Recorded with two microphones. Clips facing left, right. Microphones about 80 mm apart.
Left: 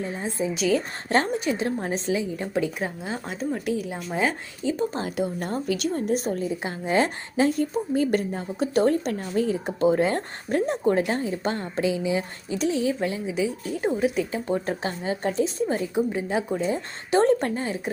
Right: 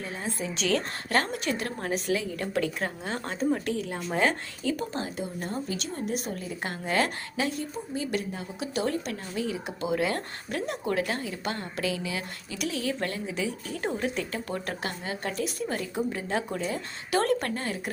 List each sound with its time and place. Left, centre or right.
0.0 s a woman's voice: left
0.5 s speech: centre
1.1 s a woman's voice: left; by 4.4 s centre
4.6 s a woman's voice: left
5.1 s a woman's voice: left
6.6 s a woman's voice: centre
7.6 s a woman's voice: left; by 17.9 s centre